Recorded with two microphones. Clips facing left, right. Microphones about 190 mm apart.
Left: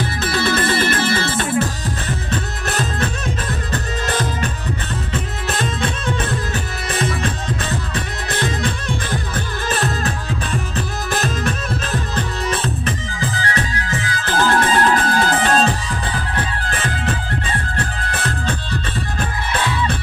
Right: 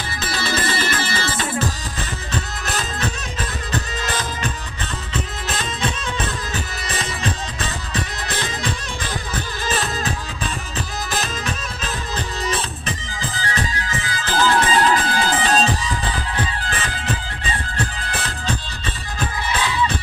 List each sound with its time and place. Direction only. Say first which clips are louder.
0.0 s music: left 6 dB; 55° left (ahead or behind)
5.6 s music: left 3 dB; 55° left (ahead or behind)
7.9 s music: left 2 dB; 55° left (ahead or behind)
19.1 s music: right 1 dB; 55° left (ahead or behind)